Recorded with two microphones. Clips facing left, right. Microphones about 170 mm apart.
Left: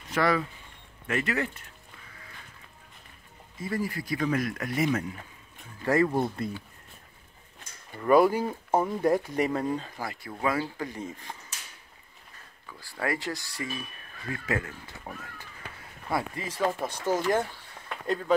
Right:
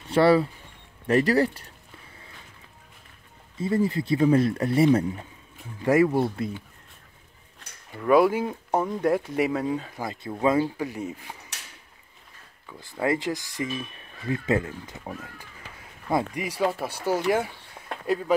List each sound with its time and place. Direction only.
0.0 s speech: 30° right (ahead or behind)
3.5 s speech: 25° right (ahead or behind)
5.8 s speech: 10° right (ahead or behind)
8.0 s speech: centre (ahead or behind)
9.9 s speech: 20° right (ahead or behind)
10.8 s speech: 10° right (ahead or behind)
12.6 s speech: 20° right (ahead or behind)